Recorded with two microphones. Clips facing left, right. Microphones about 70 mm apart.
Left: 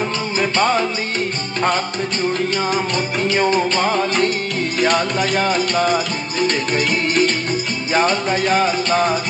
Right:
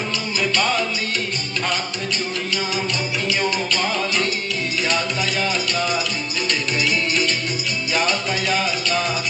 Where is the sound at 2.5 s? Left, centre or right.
Left.